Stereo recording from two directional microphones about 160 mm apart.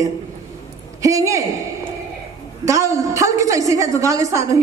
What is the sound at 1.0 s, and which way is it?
Speech, 20° right (ahead or behind).